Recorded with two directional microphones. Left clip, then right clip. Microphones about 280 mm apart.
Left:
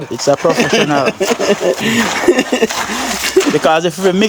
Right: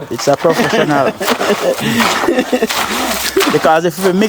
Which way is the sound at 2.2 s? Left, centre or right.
Left.